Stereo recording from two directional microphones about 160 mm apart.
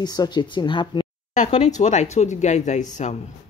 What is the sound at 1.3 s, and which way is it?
Speech, 45° left (ahead or behind).